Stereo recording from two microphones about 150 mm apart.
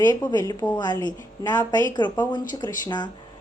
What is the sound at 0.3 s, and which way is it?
A woman's voice, 25° left (ahead or behind).